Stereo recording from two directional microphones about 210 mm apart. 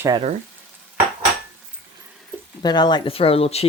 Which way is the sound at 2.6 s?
20° left (ahead or behind).